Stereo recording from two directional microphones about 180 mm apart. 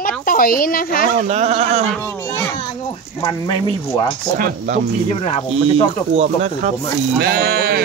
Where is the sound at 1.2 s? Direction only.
35° right (ahead or behind).